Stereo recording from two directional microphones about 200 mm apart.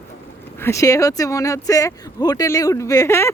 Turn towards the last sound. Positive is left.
turn(degrees=15)  # may be behind; listen again after turning